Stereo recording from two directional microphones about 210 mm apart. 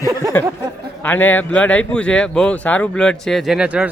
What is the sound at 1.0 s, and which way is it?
Speech, 10° left (ahead or behind).